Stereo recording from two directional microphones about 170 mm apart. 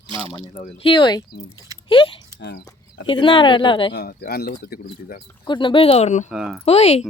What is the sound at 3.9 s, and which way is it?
Speech, 70° left (ahead or behind).